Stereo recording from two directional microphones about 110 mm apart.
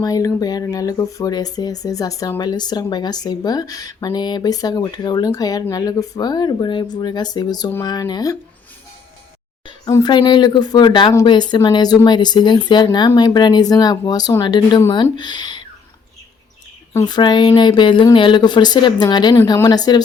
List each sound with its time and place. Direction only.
0.0 s speech: 35° left (ahead or behind)
10.0 s speech: 45° left (ahead or behind)
16.9 s speech: 35° left (ahead or behind)